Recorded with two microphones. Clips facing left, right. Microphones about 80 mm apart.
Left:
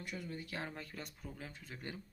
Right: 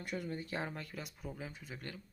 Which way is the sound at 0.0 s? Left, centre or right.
Right.